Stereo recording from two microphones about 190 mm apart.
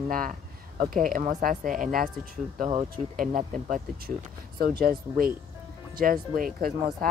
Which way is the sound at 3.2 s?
45° right (ahead or behind).